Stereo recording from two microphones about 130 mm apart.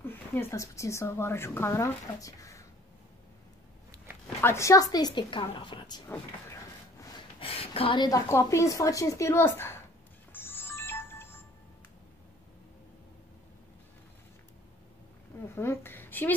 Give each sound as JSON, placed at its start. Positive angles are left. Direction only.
{"t": 0.0, "sound": "a woman's voice", "side_deg": 15}
{"t": 4.4, "sound": "a woman's voice", "side_deg": 20}
{"t": 7.3, "sound": "a sound", "side_deg": 45}
{"t": 8.3, "sound": "a woman's voice", "side_deg": 25}
{"t": 10.3, "sound": "music", "side_deg": 15}
{"t": 15.4, "sound": "a sound", "side_deg": 20}